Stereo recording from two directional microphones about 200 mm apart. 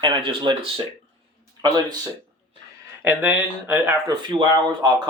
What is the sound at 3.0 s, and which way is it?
Speech, 10° right (ahead or behind).